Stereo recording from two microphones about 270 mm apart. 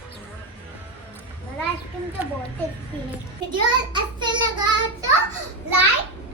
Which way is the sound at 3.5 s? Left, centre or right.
Centre.